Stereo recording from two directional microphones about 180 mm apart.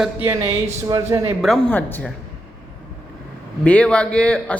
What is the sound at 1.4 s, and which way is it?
Speech, 5° left (ahead or behind).